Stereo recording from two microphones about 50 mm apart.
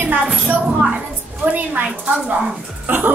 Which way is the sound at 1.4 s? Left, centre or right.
Right.